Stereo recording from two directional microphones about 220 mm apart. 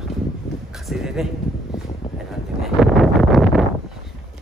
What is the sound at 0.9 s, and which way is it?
Speech, centre (ahead or behind).